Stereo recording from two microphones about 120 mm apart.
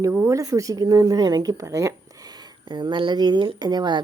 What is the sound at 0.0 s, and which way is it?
Speech, 25° right (ahead or behind).